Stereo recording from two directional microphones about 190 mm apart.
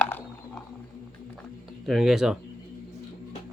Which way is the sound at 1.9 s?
Centre (ahead or behind).